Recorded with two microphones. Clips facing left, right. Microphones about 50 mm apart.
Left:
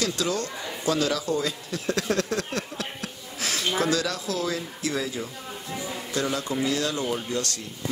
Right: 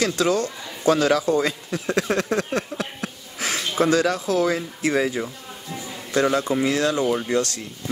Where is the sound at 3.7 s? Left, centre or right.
Right.